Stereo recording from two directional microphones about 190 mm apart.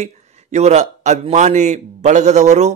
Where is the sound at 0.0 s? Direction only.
35° right (ahead or behind).